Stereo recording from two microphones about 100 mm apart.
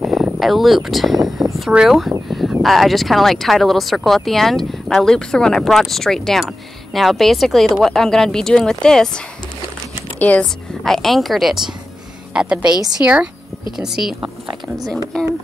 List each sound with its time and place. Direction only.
0.0 s speech: 5° right (ahead or behind)
2.2 s a sound: centre (ahead or behind)
2.6 s speech: centre (ahead or behind); by 10.4 s 15° left (ahead or behind)
10.4 s speech: 5° left (ahead or behind)